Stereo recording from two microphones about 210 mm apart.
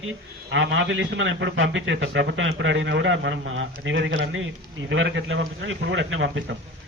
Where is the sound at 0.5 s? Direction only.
65° right (ahead or behind).